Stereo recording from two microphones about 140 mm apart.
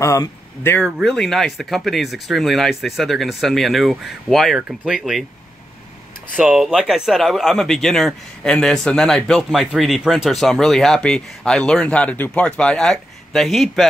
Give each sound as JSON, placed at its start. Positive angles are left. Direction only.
{"t": 0.0, "sound": "speech", "side_deg": 20}
{"t": 0.8, "sound": "a man's voice", "side_deg": 5}
{"t": 6.3, "sound": "a man's voice", "side_deg": -5}